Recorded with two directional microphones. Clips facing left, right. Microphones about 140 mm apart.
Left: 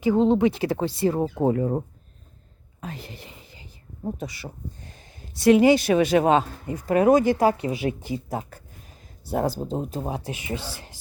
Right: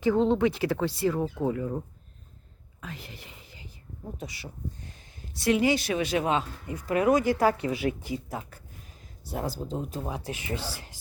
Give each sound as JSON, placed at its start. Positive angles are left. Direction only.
{"t": 0.0, "sound": "speech", "side_deg": 15}
{"t": 1.1, "sound": "speech", "side_deg": 35}
{"t": 2.8, "sound": "whispering", "side_deg": 30}
{"t": 4.0, "sound": "speech", "side_deg": 40}
{"t": 5.4, "sound": "speech", "side_deg": 55}
{"t": 10.3, "sound": "speech", "side_deg": 15}